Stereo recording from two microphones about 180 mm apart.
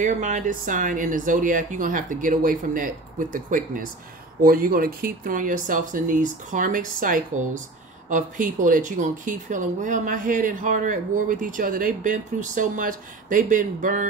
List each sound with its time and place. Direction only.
0.0 s speech: 40° right (ahead or behind)